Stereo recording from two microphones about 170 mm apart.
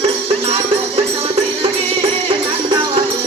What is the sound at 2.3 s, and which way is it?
Music, 30° right (ahead or behind).